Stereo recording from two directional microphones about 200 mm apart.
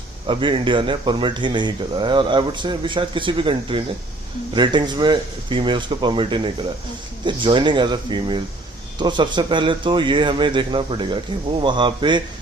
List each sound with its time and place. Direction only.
0.3 s speech: 25° right (ahead or behind)